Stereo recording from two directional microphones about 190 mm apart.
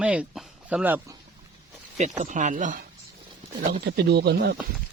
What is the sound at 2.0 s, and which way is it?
Speech, 40° right (ahead or behind).